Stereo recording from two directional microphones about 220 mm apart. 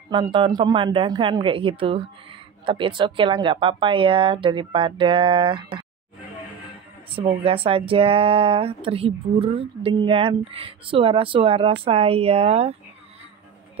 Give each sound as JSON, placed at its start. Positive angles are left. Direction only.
{"t": 0.1, "sound": "speech", "side_deg": -20}
{"t": 7.2, "sound": "speech", "side_deg": -25}